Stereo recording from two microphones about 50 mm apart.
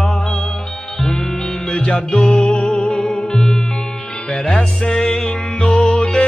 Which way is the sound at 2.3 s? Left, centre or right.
Centre.